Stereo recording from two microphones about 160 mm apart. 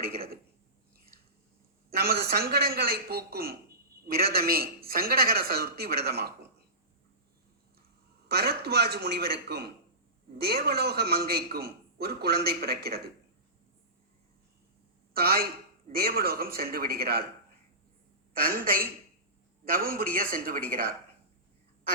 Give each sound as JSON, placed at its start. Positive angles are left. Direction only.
{"t": 1.9, "sound": "a man's voice", "side_deg": -75}
{"t": 8.3, "sound": "a man's voice", "side_deg": -80}
{"t": 15.1, "sound": "a man's voice", "side_deg": -75}
{"t": 18.3, "sound": "speech", "side_deg": -65}